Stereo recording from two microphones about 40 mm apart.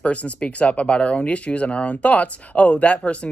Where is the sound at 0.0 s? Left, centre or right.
Left.